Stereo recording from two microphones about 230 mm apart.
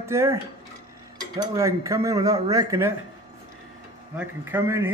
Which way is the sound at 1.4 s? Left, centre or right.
Centre.